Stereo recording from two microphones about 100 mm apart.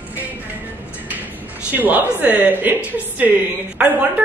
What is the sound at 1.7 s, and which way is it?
A woman's voice, 20° right (ahead or behind).